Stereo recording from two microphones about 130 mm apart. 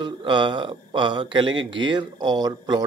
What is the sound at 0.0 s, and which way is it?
Speech, 35° right (ahead or behind).